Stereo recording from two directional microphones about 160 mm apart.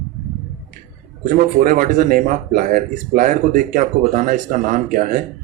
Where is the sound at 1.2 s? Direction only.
60° right (ahead or behind).